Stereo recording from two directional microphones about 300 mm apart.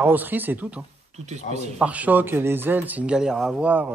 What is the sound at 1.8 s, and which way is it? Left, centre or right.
Speech, centre.